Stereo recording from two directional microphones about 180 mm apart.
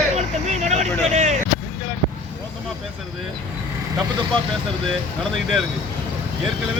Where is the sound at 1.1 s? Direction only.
40° right (ahead or behind).